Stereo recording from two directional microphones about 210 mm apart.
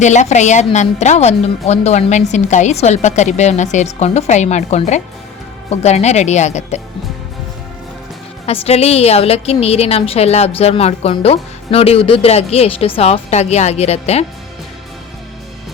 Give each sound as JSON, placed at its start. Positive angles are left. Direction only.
{"t": 0.0, "sound": "a woman's voice", "side_deg": 35}
{"t": 8.4, "sound": "a woman's voice", "side_deg": 30}